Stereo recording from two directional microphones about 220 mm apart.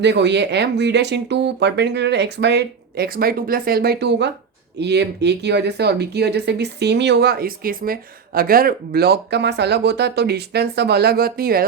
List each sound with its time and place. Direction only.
0.0 s speech: 50° right (ahead or behind)